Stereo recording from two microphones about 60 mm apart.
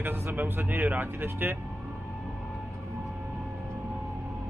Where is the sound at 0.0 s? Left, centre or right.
Right.